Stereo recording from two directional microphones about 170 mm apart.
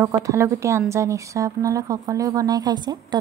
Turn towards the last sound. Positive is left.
turn(degrees=-25)  # may be behind; listen again after turning